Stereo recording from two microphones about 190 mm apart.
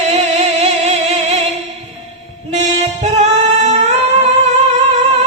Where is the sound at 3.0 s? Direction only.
35° right (ahead or behind).